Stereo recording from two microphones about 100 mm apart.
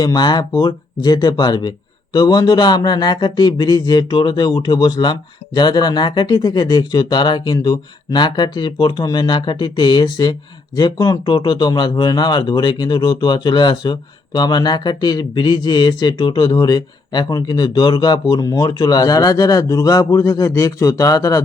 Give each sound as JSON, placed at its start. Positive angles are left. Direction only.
{"t": 0.0, "sound": "speech", "side_deg": 45}